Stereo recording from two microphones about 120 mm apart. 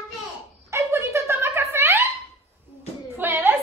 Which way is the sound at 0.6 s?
25° right (ahead or behind).